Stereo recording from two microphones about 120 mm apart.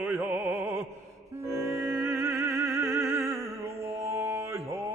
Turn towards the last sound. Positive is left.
turn(degrees=-25)  # may be behind; listen again after turning